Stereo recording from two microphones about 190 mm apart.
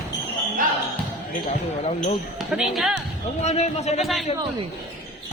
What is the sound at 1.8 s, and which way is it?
Speech, 35° left (ahead or behind).